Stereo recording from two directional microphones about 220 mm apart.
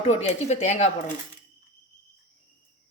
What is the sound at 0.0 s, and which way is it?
Speech, 30° left (ahead or behind).